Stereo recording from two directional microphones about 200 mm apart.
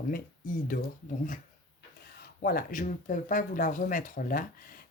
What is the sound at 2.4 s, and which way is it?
Speech, 45° left (ahead or behind).